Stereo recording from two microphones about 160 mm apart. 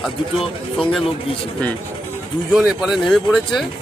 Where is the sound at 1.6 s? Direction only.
10° left (ahead or behind).